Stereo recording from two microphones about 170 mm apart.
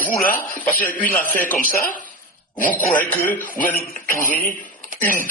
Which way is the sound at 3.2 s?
50° left (ahead or behind).